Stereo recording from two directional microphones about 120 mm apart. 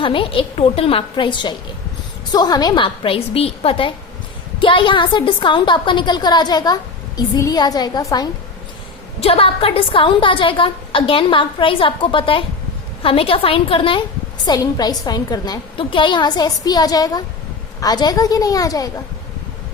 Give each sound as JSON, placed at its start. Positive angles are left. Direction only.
{"t": 0.0, "sound": "a woman's voice", "side_deg": 45}
{"t": 9.2, "sound": "a woman's voice", "side_deg": 50}
{"t": 14.4, "sound": "a woman's voice", "side_deg": 35}
{"t": 15.8, "sound": "a woman's voice", "side_deg": 45}